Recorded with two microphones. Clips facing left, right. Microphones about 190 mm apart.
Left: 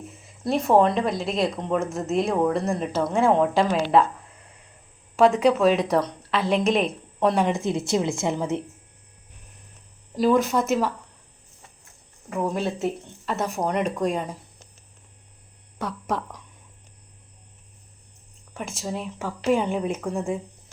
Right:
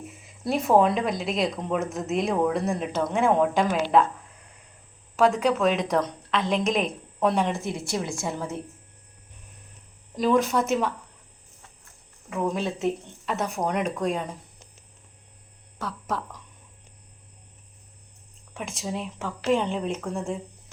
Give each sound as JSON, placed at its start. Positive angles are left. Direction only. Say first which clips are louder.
{"t": 0.4, "sound": "speech", "louder": "left 1 dB", "side_deg": 0}
{"t": 5.1, "sound": "speech", "louder": "left 3 dB", "side_deg": 10}
{"t": 7.6, "sound": "a woman's voice", "louder": "left 6 dB", "side_deg": 20}
{"t": 10.2, "sound": "speech", "louder": "left 2 dB", "side_deg": 5}
{"t": 12.3, "sound": "speech", "louder": "left 1 dB", "side_deg": 5}
{"t": 18.5, "sound": "speech", "louder": "left 1 dB", "side_deg": 5}